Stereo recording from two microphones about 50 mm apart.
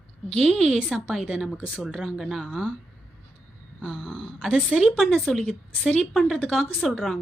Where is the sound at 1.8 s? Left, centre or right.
Centre.